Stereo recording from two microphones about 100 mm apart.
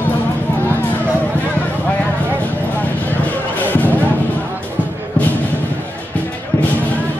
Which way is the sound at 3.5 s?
15° left (ahead or behind).